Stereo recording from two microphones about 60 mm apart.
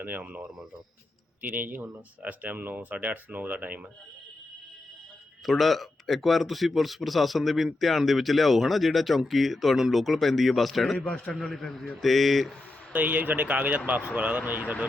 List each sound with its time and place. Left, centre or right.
0.0 s speech: right
5.5 s speech: centre
10.9 s a man's voice: centre
12.9 s speech: right